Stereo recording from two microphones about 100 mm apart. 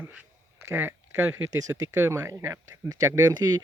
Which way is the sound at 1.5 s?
35° right (ahead or behind).